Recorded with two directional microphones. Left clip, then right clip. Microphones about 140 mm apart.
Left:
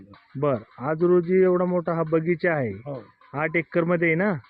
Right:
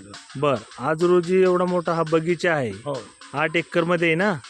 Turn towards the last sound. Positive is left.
turn(degrees=-5)  # may be behind; listen again after turning